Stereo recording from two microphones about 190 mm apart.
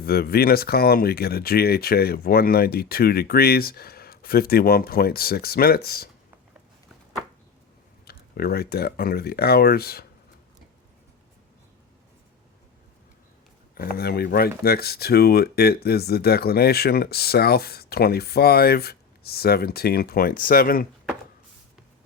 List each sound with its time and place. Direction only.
0.0 s speech: 55° left (ahead or behind)
8.0 s speech: 55° left (ahead or behind)
13.7 s speech: 50° left (ahead or behind)